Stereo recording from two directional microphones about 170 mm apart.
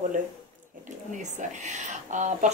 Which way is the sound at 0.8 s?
45° right (ahead or behind).